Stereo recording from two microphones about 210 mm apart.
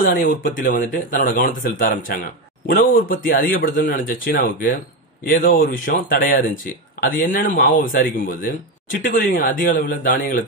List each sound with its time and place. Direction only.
0.4 s speech: 40° left (ahead or behind)